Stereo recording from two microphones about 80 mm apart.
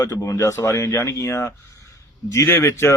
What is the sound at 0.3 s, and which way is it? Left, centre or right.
Speech, left.